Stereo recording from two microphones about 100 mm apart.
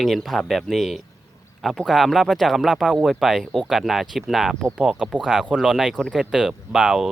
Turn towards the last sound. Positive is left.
turn(degrees=-5)  # may be behind; listen again after turning